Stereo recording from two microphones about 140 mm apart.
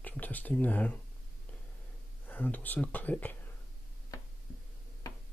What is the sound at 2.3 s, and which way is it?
Speech, 15° left (ahead or behind).